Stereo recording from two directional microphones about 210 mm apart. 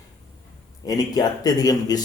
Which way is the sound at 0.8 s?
20° left (ahead or behind).